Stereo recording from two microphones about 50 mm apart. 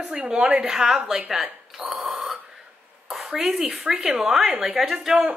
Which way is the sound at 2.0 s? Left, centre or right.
Centre.